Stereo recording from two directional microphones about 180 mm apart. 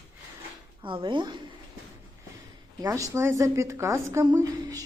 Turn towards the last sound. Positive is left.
turn(degrees=-20)  # may be behind; listen again after turning